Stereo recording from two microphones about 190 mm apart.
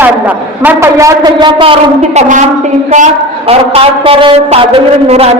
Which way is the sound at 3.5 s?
30° right (ahead or behind).